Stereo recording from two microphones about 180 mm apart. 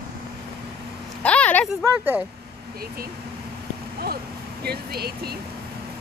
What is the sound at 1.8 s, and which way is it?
Speech, 10° right (ahead or behind).